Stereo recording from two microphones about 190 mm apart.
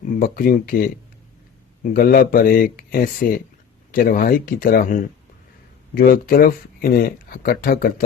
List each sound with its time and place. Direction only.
0.0 s speech: 45° left (ahead or behind)
6.0 s speech: 50° left (ahead or behind)